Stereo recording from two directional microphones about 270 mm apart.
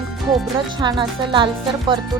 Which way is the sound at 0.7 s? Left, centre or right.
Centre.